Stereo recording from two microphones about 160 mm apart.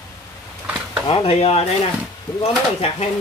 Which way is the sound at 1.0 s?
35° left (ahead or behind).